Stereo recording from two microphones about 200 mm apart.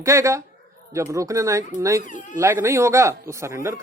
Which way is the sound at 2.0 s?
40° left (ahead or behind).